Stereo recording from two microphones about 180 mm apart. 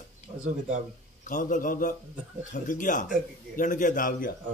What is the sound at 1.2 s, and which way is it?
A man's voice, 45° left (ahead or behind).